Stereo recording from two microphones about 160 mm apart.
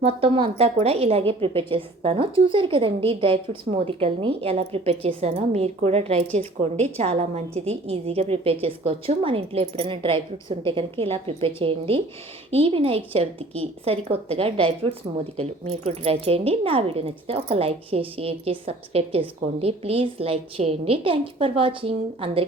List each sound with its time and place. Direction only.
0.0 s a woman's voice: 35° right (ahead or behind)